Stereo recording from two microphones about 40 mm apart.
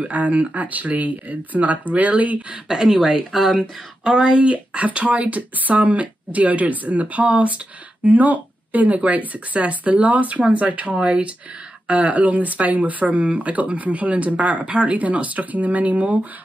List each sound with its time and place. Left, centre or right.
0.0 s speech: right
2.7 s speech: centre
4.0 s speech: right
11.0 s speech: right
11.9 s speech: right